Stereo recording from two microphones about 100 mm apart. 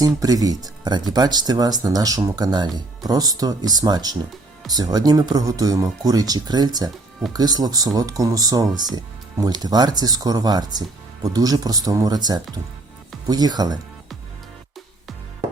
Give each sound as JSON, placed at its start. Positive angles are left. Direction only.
{"t": 0.0, "sound": "speech", "side_deg": -35}